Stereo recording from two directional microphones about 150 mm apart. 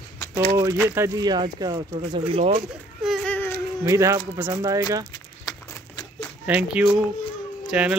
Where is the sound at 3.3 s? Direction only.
15° left (ahead or behind).